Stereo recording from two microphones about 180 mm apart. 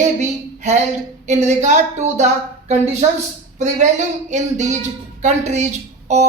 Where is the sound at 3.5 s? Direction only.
40° right (ahead or behind).